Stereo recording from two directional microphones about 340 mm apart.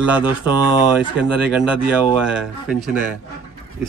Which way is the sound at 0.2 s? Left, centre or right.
Centre.